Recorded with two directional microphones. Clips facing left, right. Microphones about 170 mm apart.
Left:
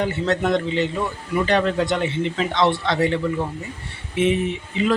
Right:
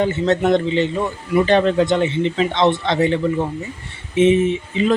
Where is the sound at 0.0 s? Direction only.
25° right (ahead or behind).